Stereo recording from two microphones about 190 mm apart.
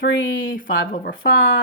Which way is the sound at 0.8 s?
50° left (ahead or behind).